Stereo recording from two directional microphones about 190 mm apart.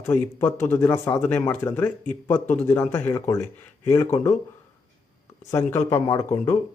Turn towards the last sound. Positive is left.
turn(degrees=15)  # may be behind; listen again after turning